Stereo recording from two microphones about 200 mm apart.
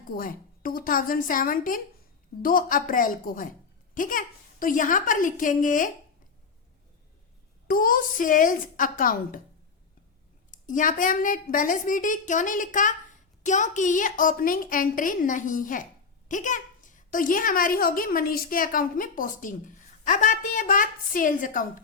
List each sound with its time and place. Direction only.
0.1 s a child's voice: 45° left (ahead or behind)
7.7 s a child's voice: 45° left (ahead or behind)
10.5 s a woman's voice: 40° left (ahead or behind)